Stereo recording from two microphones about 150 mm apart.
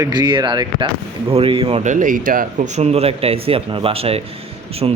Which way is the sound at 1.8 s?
60° right (ahead or behind).